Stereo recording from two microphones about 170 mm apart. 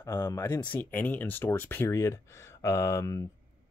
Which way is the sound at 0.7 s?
10° left (ahead or behind).